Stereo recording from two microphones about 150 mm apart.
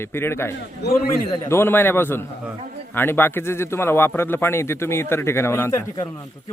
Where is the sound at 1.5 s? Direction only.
15° left (ahead or behind).